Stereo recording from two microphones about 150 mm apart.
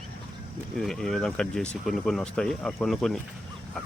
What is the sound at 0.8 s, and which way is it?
Speech, 5° left (ahead or behind).